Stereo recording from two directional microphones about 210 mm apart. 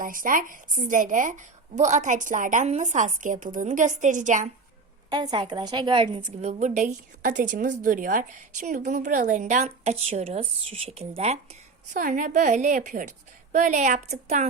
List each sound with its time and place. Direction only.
0.0 s a woman's voice: 40° right (ahead or behind)
5.0 s a woman's voice: 20° right (ahead or behind)